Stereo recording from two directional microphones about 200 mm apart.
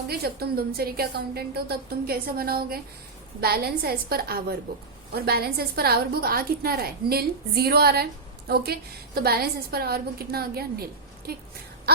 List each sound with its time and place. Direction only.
0.1 s a woman's voice: 50° right (ahead or behind)